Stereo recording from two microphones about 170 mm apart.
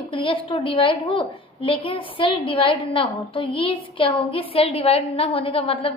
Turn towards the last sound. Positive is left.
turn(degrees=30)  # may be behind; listen again after turning